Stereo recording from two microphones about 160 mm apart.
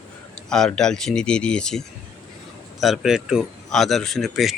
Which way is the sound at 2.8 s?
Centre (ahead or behind).